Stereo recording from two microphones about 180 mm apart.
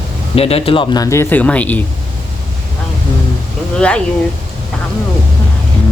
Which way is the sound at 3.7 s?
5° left (ahead or behind).